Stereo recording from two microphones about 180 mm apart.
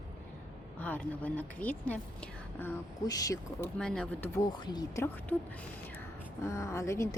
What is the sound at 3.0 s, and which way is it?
Speech, 20° left (ahead or behind).